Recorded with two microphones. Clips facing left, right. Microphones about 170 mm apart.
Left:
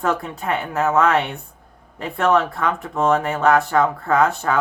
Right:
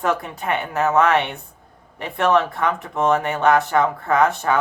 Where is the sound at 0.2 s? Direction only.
20° right (ahead or behind).